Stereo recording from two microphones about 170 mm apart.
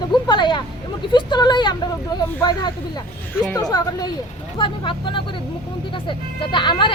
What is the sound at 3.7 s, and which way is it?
Speech, 25° left (ahead or behind).